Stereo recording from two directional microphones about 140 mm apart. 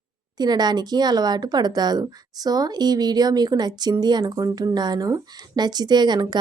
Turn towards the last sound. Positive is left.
turn(degrees=-30)  # may be behind; listen again after turning